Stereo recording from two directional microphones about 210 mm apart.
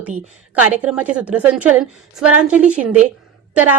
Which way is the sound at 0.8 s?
5° right (ahead or behind).